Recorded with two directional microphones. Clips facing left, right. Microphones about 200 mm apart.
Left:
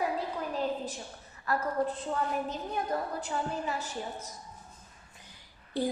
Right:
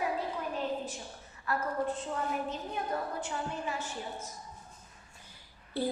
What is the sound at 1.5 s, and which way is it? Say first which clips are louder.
Speech: left 2 dB; 40° left (ahead or behind).